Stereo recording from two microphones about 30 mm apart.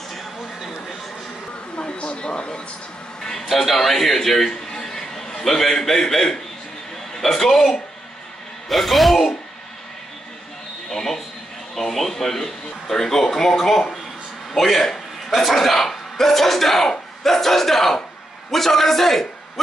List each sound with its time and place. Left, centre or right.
1.8 s a woman's voice: left
3.4 s a man's voice: centre
10.9 s a sound: centre
11.7 s a man's voice: centre